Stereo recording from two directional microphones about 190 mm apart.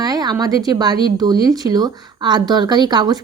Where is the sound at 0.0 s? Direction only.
20° right (ahead or behind).